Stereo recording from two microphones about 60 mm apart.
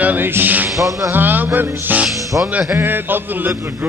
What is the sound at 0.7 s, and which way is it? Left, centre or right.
Music, right.